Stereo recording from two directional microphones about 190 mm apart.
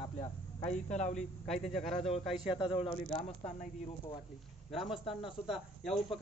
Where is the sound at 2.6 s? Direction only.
25° left (ahead or behind).